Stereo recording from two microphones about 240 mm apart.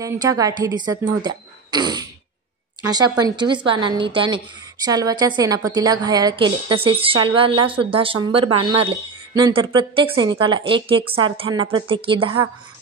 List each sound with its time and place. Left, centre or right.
0.0 s a woman's voice: centre